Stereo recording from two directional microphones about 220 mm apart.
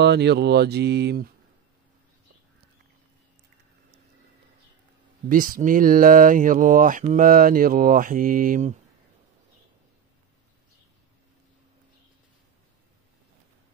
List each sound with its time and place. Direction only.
0.0 s speech: 50° right (ahead or behind)
5.3 s speech: 40° right (ahead or behind)